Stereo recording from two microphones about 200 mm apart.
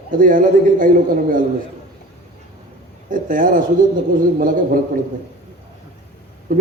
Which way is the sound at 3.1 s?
45° right (ahead or behind).